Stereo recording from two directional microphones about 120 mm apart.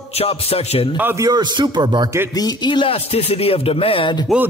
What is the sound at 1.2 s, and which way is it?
Speech, 35° right (ahead or behind).